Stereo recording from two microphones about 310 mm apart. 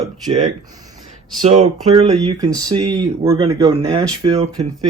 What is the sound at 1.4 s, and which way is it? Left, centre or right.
Speech, right.